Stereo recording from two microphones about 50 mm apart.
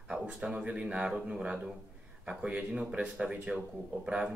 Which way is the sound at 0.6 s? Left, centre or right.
Right.